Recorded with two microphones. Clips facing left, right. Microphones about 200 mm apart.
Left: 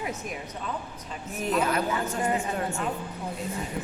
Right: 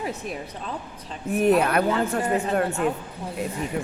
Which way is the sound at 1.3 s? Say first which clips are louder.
Right 7 dB; 60° right (ahead or behind).